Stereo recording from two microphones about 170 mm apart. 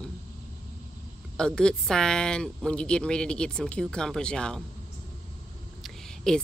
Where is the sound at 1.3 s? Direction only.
5° left (ahead or behind).